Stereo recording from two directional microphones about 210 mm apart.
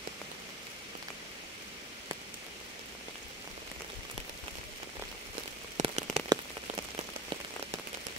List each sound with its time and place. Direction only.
5.8 s rain on surface: 30° right (ahead or behind)
6.2 s rain on surface: 20° right (ahead or behind)